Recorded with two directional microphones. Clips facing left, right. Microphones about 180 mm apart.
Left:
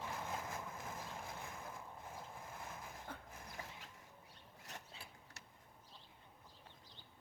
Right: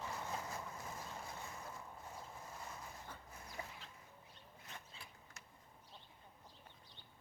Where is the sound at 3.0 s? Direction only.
55° left (ahead or behind).